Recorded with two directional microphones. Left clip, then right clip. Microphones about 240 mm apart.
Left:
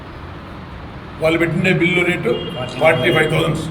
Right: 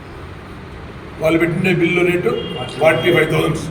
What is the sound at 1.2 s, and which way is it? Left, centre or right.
Speech, centre.